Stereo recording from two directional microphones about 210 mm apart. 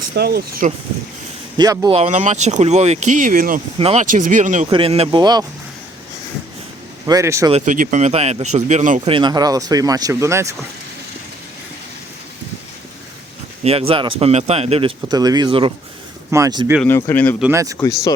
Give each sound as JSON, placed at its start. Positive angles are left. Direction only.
{"t": 0.2, "sound": "speech", "side_deg": -50}
{"t": 1.5, "sound": "speech", "side_deg": -20}
{"t": 2.0, "sound": "speech", "side_deg": -35}
{"t": 3.8, "sound": "speech", "side_deg": -30}
{"t": 7.0, "sound": "speech", "side_deg": -15}
{"t": 7.5, "sound": "speech", "side_deg": -40}
{"t": 9.1, "sound": "speech", "side_deg": -20}
{"t": 13.7, "sound": "speech", "side_deg": -25}
{"t": 16.8, "sound": "speech", "side_deg": 10}
{"t": 17.4, "sound": "speech", "side_deg": -15}
{"t": 17.7, "sound": "speech", "side_deg": 15}